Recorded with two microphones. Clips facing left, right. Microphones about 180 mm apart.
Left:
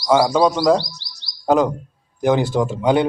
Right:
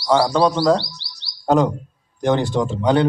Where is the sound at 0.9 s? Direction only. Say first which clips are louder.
Even; 45° left (ahead or behind).